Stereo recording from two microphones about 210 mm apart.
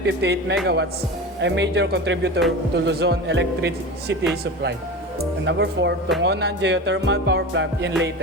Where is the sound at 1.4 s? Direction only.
55° right (ahead or behind).